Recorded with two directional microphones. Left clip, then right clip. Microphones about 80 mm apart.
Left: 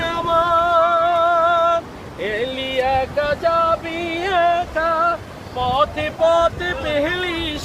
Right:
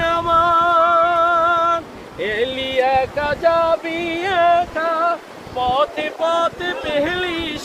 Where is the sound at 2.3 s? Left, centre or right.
Right.